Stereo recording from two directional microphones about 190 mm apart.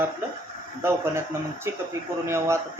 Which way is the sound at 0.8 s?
15° right (ahead or behind).